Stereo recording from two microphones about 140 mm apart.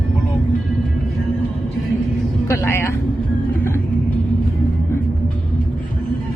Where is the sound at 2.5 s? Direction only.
15° left (ahead or behind).